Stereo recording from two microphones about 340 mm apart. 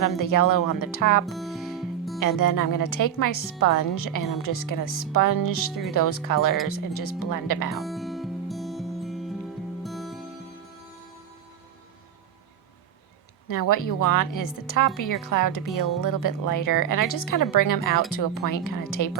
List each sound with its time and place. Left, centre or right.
0.0 s a woman's voice: left
1.3 s music: centre
2.1 s a woman's voice: left
7.7 s music: centre
13.5 s a woman's voice: left